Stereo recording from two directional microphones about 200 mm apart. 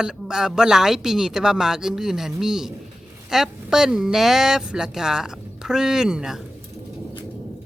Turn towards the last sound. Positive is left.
turn(degrees=-5)  # may be behind; listen again after turning